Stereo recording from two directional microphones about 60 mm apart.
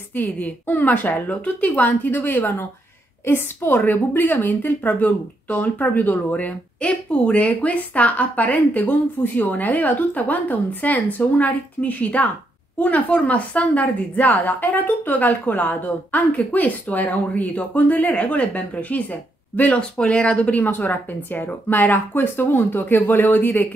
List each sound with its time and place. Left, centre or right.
0.1 s a woman's voice: left